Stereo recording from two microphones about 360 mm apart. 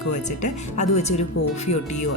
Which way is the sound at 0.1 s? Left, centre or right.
Centre.